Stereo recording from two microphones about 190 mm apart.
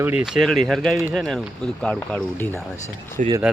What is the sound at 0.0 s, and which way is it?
Speech, 5° right (ahead or behind).